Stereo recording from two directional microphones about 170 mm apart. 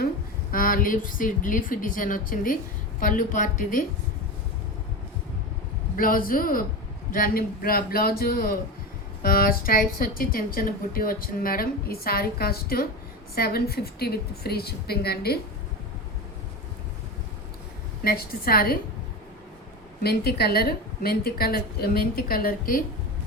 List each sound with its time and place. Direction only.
0.5 s a woman's voice: 55° left (ahead or behind)
6.0 s a woman's voice: 55° left (ahead or behind)
18.0 s a woman's voice: 60° left (ahead or behind)
20.0 s a woman's voice: 70° left (ahead or behind)